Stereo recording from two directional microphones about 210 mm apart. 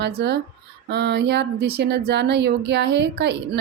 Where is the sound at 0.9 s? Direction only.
55° right (ahead or behind).